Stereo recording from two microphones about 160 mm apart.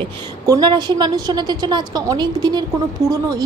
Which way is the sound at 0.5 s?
25° right (ahead or behind).